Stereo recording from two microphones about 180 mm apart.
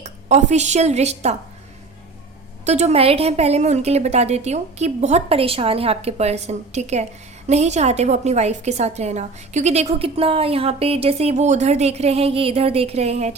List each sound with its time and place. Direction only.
0.0 s a woman's voice: 40° right (ahead or behind)
2.6 s a woman's voice: 40° right (ahead or behind)